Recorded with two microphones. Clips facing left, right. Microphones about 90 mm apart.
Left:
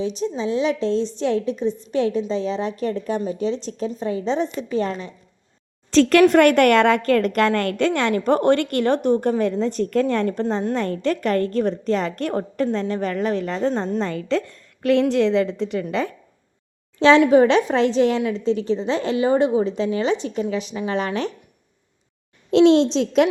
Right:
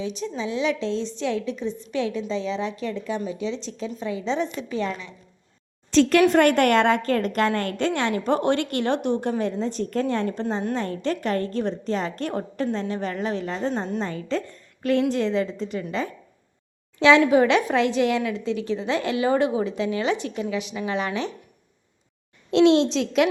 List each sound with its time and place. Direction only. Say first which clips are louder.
0.0 s a woman's voice: left 5 dB; 35° left (ahead or behind)
6.0 s a woman's voice: left 3 dB; 90° left; by 13.8 s 55° left (ahead or behind)
14.0 s a woman's voice: left 4 dB; 85° left
15.1 s a woman's voice: left 5 dB; 75° left (ahead or behind)
17.0 s a woman's voice: left 3 dB; 35° left (ahead or behind)
22.5 s a child's voice: left 3 dB; centre (ahead or behind)
22.9 s a woman's voice: left 3 dB; 40° left (ahead or behind)